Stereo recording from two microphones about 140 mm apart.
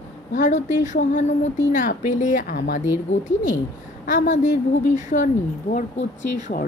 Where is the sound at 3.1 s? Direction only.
60° left (ahead or behind).